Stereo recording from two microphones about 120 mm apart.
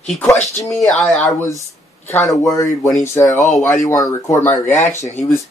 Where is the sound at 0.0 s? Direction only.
5° left (ahead or behind).